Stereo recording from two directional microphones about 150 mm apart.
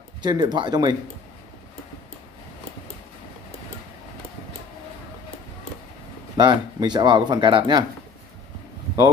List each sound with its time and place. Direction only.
0.2 s speech: 30° right (ahead or behind)
6.3 s speech: 30° right (ahead or behind)